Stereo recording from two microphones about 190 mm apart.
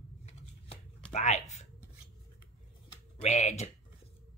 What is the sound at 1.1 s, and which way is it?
Speech, 40° left (ahead or behind).